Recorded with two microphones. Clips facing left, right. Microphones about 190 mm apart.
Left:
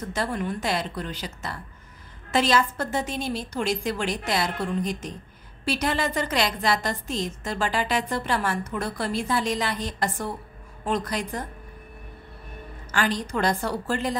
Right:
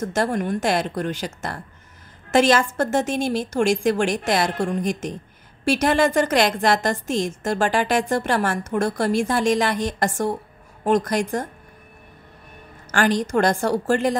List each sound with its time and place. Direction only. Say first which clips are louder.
0.0 s a woman's voice: right 6 dB; 45° right (ahead or behind)
12.9 s a woman's voice: right 6 dB; 45° right (ahead or behind)